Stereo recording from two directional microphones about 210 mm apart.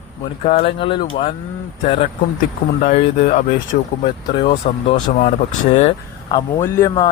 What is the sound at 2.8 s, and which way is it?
Speech, 30° left (ahead or behind).